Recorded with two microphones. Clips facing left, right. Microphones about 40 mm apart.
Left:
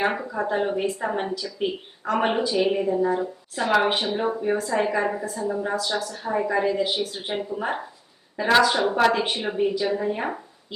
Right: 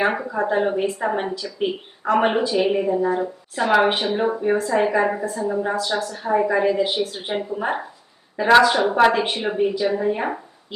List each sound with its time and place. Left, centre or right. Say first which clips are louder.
0.2 s a woman's voice: right 4 dB; centre